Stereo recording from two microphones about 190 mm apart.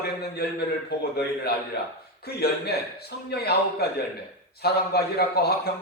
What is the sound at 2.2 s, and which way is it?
A man's voice, 55° left (ahead or behind).